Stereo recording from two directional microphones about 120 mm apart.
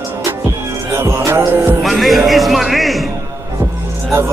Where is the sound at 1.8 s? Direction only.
Centre (ahead or behind).